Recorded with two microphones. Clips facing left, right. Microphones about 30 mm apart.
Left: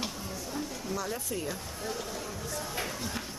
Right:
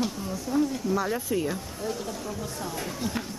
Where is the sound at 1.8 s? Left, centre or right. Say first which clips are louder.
Right 4 dB; centre.